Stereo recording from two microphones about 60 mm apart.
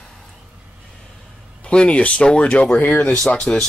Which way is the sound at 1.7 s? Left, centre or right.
Centre.